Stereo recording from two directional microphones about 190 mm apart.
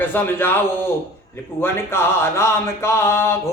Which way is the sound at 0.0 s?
10° left (ahead or behind).